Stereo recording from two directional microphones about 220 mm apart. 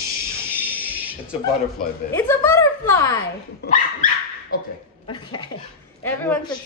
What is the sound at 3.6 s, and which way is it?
Dog, 35° left (ahead or behind).